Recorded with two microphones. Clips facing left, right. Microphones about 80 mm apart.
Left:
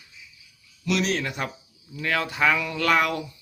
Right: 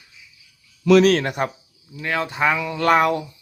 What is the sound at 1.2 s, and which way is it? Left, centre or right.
Speech, right.